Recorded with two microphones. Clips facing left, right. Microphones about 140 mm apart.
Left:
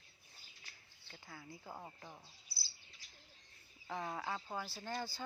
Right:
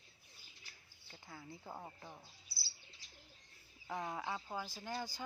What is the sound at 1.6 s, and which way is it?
Speech, 5° right (ahead or behind).